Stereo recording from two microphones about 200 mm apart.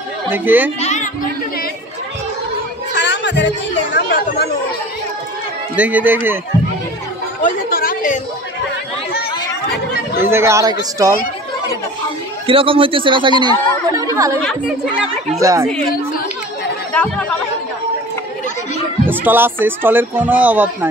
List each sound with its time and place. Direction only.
0.3 s speech: 10° right (ahead or behind)
0.7 s children playing: 35° left (ahead or behind)
2.9 s chatter: 60° left (ahead or behind)
5.8 s speech: 10° right (ahead or behind)
7.4 s chatter: 45° left (ahead or behind)
10.1 s speech: 10° right (ahead or behind)
12.4 s speech: 25° right (ahead or behind)
15.4 s speech: 15° right (ahead or behind)
15.9 s speech: 45° left (ahead or behind)
16.9 s speech: 10° left (ahead or behind)
19.0 s speech: 10° right (ahead or behind)